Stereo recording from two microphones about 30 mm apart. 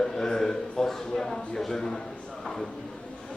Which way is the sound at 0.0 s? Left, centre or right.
Centre.